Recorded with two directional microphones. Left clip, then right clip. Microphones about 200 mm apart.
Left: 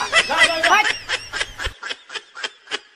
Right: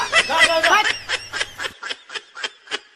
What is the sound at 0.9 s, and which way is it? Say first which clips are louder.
Snicker: even; centre (ahead or behind).